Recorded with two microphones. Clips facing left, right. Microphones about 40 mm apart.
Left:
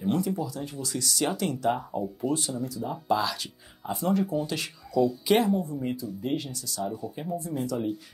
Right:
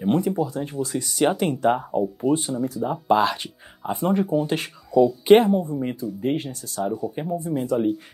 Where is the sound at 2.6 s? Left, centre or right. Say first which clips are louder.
Right 7 dB; right.